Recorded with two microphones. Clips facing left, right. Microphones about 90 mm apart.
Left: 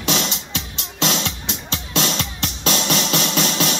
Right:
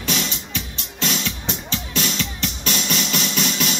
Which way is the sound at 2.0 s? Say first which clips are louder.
Left 1 dB; 45° left (ahead or behind).